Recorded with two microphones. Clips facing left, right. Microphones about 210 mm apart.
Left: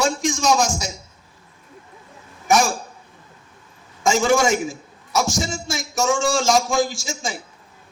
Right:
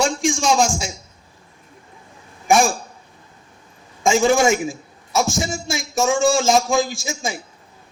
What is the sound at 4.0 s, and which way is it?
A man's voice, 25° right (ahead or behind).